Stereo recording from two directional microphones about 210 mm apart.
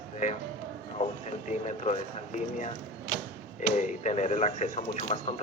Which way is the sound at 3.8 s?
35° left (ahead or behind).